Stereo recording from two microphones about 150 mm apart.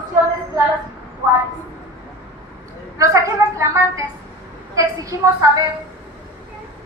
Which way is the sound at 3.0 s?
20° right (ahead or behind).